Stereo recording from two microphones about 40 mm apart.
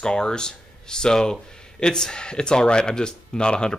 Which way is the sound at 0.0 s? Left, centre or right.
Centre.